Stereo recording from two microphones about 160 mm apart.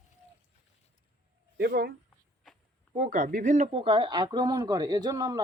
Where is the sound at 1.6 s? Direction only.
70° right (ahead or behind).